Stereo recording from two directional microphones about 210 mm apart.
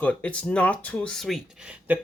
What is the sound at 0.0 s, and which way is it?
Speech, 5° left (ahead or behind).